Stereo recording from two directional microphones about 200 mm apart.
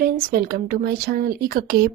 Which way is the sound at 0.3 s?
45° right (ahead or behind).